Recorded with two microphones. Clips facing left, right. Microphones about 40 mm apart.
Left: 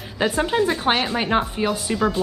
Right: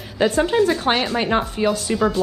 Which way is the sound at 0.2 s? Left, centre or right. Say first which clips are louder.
Right 3 dB; centre.